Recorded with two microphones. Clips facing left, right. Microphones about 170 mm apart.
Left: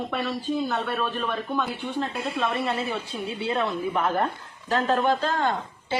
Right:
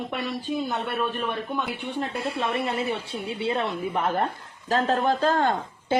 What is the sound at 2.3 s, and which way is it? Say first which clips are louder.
Speech: left 2 dB; 20° right (ahead or behind).